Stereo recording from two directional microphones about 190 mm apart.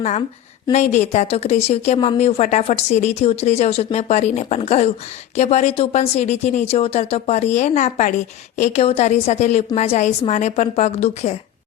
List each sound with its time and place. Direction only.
0.7 s speech: 35° left (ahead or behind)